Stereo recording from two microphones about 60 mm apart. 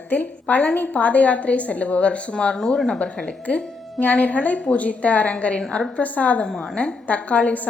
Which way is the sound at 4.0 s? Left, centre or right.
Left.